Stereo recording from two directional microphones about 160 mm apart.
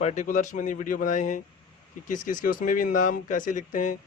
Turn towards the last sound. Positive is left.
turn(degrees=55)  # may be behind; listen again after turning